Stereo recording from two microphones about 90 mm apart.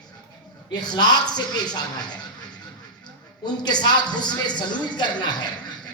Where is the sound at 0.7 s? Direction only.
50° left (ahead or behind).